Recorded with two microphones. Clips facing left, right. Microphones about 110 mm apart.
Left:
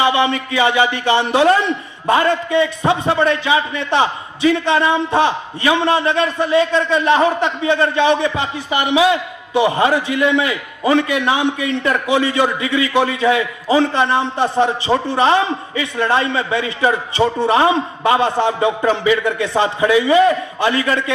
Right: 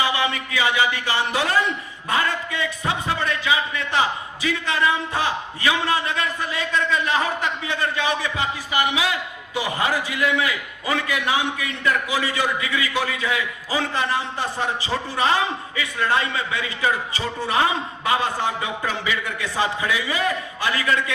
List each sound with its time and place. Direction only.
0.0 s a man's voice: 25° left (ahead or behind)